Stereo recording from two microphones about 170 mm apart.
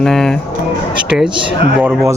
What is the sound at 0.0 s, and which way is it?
Speech, centre (ahead or behind).